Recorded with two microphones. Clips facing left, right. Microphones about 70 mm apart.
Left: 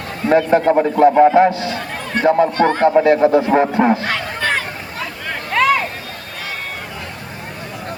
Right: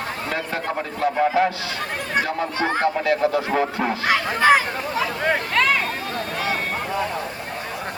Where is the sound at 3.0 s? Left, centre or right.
Left.